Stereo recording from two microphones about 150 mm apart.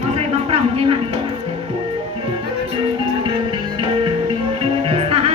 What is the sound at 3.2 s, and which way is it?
Music, 30° right (ahead or behind).